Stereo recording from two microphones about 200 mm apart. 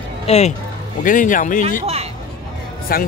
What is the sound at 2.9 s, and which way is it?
Speech, 50° left (ahead or behind).